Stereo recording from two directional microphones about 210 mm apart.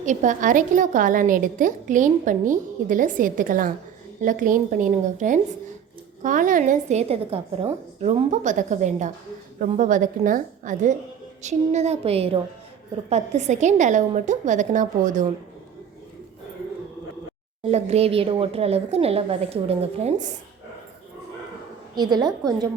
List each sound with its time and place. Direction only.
0.0 s a woman's voice: 35° right (ahead or behind)
17.6 s a woman's voice: 30° right (ahead or behind)
21.9 s a woman's voice: 20° right (ahead or behind)